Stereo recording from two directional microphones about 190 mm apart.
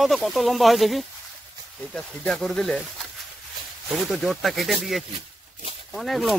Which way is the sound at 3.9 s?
Centre (ahead or behind).